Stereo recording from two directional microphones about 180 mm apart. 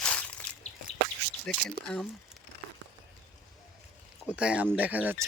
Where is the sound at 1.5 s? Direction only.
5° left (ahead or behind).